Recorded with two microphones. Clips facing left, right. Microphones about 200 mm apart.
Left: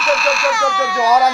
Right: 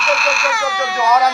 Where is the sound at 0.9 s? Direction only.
30° left (ahead or behind).